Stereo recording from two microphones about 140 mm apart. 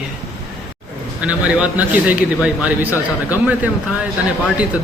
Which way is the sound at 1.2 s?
10° right (ahead or behind).